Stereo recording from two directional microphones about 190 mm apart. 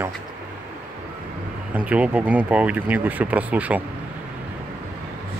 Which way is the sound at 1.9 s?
5° right (ahead or behind).